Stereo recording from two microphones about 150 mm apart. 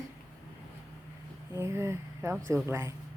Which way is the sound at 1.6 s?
15° right (ahead or behind).